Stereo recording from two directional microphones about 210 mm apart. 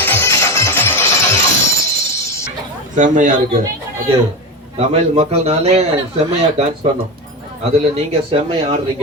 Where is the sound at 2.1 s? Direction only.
15° left (ahead or behind).